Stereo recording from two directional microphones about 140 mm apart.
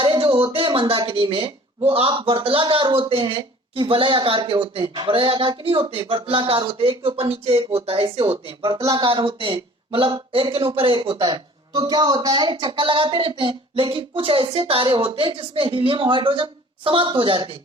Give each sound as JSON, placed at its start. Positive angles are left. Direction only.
{"t": 0.0, "sound": "speech", "side_deg": -40}
{"t": 8.8, "sound": "speech", "side_deg": -25}
{"t": 9.0, "sound": "speech", "side_deg": -40}